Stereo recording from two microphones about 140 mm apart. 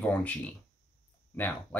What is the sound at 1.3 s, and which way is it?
Speech, 10° left (ahead or behind).